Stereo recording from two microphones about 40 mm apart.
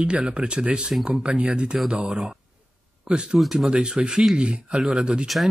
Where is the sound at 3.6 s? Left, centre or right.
Right.